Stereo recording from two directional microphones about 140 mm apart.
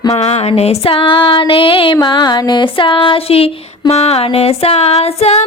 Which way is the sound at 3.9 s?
50° left (ahead or behind).